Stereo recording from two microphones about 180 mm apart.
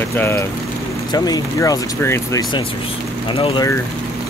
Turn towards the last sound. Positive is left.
turn(degrees=25)  # may be behind; listen again after turning